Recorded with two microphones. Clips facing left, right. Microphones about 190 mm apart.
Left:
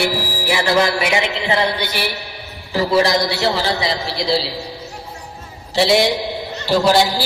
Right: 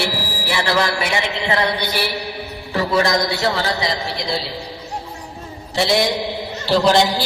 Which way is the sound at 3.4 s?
30° left (ahead or behind).